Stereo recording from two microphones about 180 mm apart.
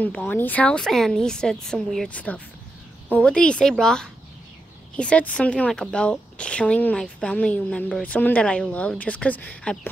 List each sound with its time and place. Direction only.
0.0 s a woman's voice: 10° left (ahead or behind)